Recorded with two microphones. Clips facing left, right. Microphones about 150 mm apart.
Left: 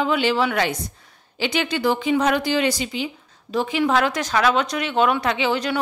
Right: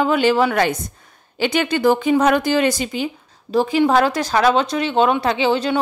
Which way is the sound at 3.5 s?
35° right (ahead or behind).